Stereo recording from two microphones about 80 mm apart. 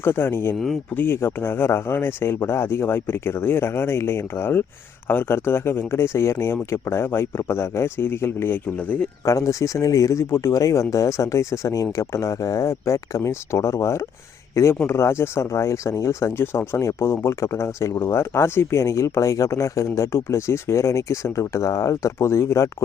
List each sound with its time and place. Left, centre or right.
0.0 s speech: left
9.2 s speech: left